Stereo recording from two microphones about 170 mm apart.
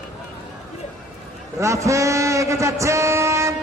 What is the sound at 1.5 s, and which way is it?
A man's voice, 15° right (ahead or behind).